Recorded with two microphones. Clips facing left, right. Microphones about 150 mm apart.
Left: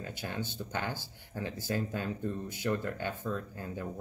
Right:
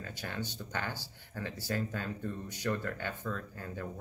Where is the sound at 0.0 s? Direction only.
15° left (ahead or behind).